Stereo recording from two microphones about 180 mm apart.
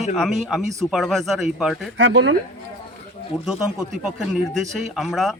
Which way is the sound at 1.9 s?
90° right.